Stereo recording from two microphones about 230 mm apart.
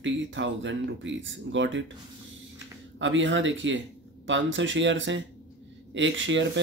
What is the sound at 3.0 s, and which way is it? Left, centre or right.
Speech, right.